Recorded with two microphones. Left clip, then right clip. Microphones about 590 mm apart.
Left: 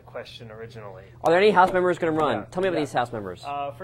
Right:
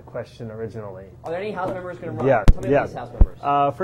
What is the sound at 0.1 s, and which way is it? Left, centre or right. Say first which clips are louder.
Speech: right 5 dB; right.